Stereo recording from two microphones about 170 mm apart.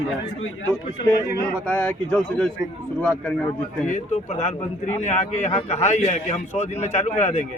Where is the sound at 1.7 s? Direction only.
10° left (ahead or behind).